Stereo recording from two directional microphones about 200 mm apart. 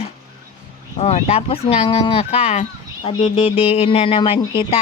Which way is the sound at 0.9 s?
35° left (ahead or behind).